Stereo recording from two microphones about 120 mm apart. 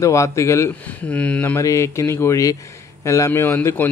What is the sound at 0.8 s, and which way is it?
Speech, 10° left (ahead or behind).